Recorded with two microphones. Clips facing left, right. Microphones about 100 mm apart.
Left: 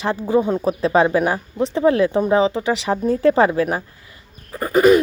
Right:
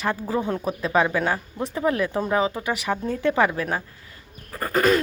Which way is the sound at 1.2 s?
20° left (ahead or behind).